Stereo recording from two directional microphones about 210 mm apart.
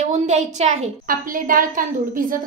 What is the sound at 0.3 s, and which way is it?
A woman's voice, 35° right (ahead or behind).